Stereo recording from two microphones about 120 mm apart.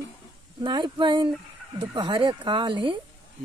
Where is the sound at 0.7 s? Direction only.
40° right (ahead or behind).